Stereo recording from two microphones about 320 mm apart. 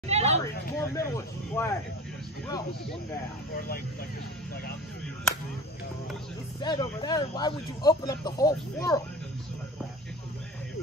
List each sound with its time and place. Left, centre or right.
0.1 s a sound: centre
0.7 s speech: centre
3.5 s speech: left
6.6 s speech: centre